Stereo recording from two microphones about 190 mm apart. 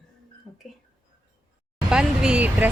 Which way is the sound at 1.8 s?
5° right (ahead or behind).